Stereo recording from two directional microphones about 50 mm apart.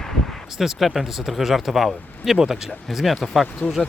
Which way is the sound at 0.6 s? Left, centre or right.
Centre.